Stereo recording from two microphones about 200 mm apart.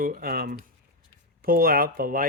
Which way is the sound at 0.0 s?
45° right (ahead or behind).